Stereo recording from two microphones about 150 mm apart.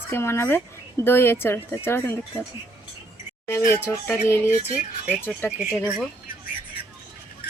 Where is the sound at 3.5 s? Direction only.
20° left (ahead or behind).